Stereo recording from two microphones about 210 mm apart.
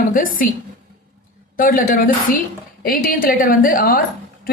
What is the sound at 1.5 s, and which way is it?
A woman's voice, 40° left (ahead or behind).